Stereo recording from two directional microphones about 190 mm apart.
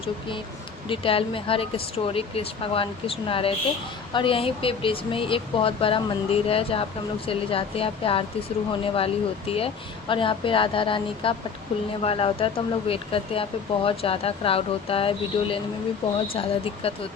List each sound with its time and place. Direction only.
0.9 s speech: 30° left (ahead or behind)